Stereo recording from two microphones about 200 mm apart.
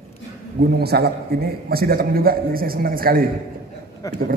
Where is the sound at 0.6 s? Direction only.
50° right (ahead or behind).